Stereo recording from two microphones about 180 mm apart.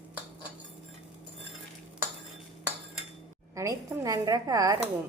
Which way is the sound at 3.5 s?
15° right (ahead or behind).